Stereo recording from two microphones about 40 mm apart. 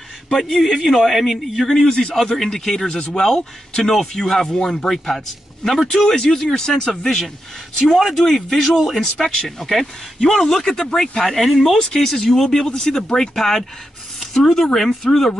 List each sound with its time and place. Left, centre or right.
0.5 s a man's voice: centre
1.7 s a man's voice: centre
2.1 s a man's voice: centre
11.8 s a man's voice: centre
12.1 s speech: centre